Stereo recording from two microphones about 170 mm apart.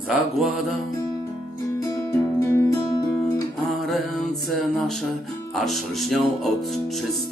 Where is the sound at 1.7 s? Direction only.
15° left (ahead or behind).